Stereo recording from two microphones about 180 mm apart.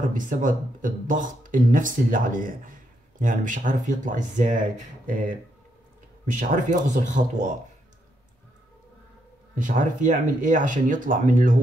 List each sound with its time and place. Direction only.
0.1 s speech: 45° right (ahead or behind)
6.5 s speech: 45° right (ahead or behind)
9.6 s speech: 45° right (ahead or behind)